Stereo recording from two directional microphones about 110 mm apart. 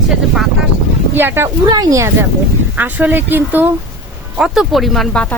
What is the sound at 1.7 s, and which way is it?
Speech, 35° right (ahead or behind).